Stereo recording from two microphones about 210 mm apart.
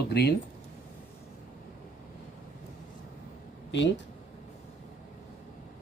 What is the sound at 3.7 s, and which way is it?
Speech, 60° left (ahead or behind).